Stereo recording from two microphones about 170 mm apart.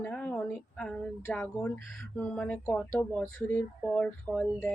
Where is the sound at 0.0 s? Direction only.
5° left (ahead or behind).